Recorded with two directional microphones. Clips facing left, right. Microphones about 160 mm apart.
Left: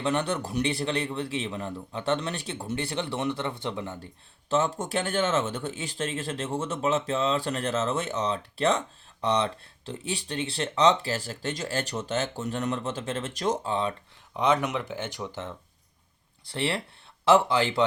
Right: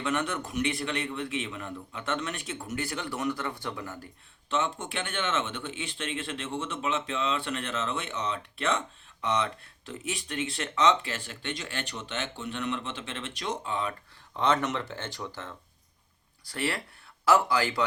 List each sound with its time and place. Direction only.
0.0 s speech: 30° left (ahead or behind)
4.4 s speech: 40° left (ahead or behind)
14.3 s speech: 15° left (ahead or behind)